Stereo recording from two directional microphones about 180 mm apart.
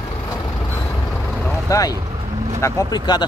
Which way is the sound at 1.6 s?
20° left (ahead or behind).